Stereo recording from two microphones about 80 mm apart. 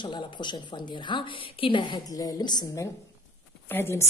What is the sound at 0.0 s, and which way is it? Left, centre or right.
A woman's voice, left.